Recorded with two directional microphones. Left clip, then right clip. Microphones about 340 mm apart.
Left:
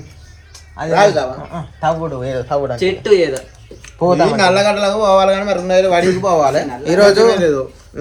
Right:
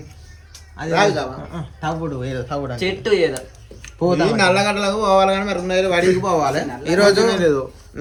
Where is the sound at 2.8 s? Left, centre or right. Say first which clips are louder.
Left 4 dB; centre.